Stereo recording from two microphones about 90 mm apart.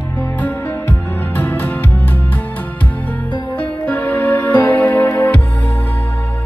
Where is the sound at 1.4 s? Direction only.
20° left (ahead or behind).